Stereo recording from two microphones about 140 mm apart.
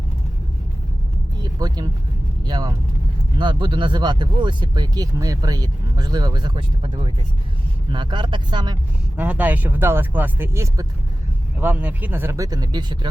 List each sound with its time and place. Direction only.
1.4 s vehicle: 30° right (ahead or behind)
2.5 s speech: 30° right (ahead or behind)
9.1 s speech: 10° right (ahead or behind); by 13.1 s 30° right (ahead or behind)